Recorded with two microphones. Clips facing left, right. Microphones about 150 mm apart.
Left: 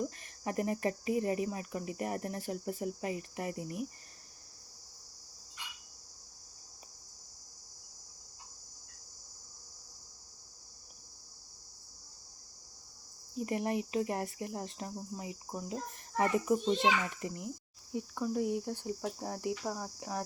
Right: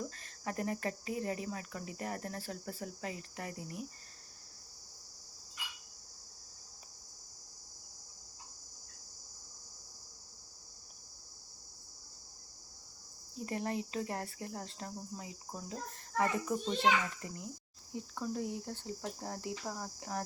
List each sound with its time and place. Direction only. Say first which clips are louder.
0.0 s cricket: left 4 dB; 15° left (ahead or behind)
13.3 s cricket: left 4 dB; 15° left (ahead or behind)